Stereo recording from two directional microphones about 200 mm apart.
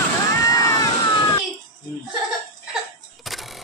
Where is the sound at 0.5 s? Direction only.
15° left (ahead or behind).